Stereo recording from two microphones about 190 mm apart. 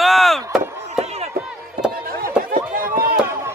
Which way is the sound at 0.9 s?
35° right (ahead or behind).